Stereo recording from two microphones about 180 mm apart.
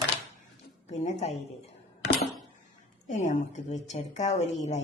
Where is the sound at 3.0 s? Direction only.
40° left (ahead or behind).